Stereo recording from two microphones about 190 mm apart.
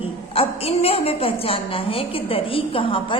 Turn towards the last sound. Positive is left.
turn(degrees=30)  # may be behind; listen again after turning